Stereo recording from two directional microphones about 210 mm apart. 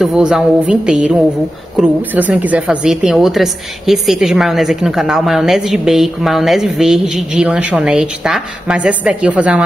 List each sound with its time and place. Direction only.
0.0 s a woman's voice: centre (ahead or behind)